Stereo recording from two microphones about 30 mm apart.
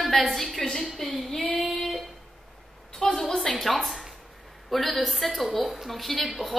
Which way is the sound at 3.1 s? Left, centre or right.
Centre.